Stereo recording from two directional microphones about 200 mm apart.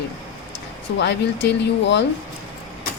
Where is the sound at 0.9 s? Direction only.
60° left (ahead or behind).